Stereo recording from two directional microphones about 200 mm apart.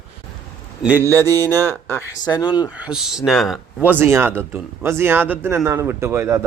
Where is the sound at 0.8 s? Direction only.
10° right (ahead or behind).